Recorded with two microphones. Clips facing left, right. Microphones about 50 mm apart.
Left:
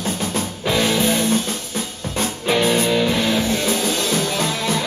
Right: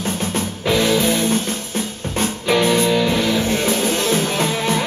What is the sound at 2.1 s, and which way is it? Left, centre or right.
Music, right.